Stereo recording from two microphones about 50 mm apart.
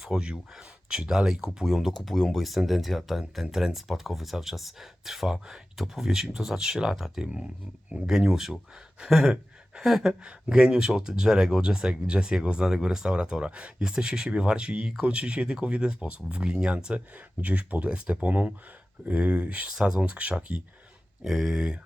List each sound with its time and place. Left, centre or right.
0.0 s speech: centre
7.3 s speech: right
9.0 s a sound: centre
10.1 s speech: centre
17.4 s speech: right
19.6 s speech: centre
21.2 s speech: centre